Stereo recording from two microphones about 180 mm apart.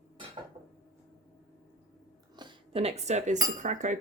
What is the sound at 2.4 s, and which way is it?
Cutlery, 30° right (ahead or behind).